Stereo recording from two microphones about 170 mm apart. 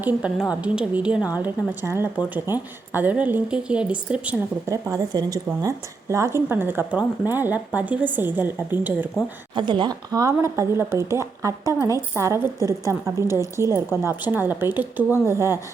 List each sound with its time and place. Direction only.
0.0 s a woman's voice: 10° right (ahead or behind)
4.7 s a woman's voice: 20° right (ahead or behind)
9.6 s a woman's voice: 25° right (ahead or behind)